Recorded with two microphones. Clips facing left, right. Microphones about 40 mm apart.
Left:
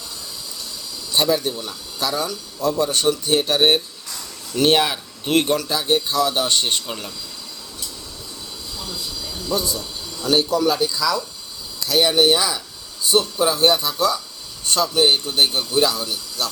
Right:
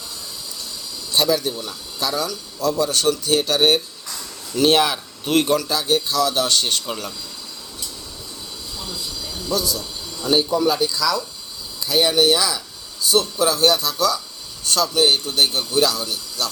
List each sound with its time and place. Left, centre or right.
1.1 s speech: left
2.0 s speech: left
2.3 s speech: left
5.8 s speech: left
6.8 s a man's voice: centre
8.8 s train wheels squealing: centre
9.6 s speech: left
10.3 s speech: centre
10.7 s speech: centre
12.1 s a man's voice: centre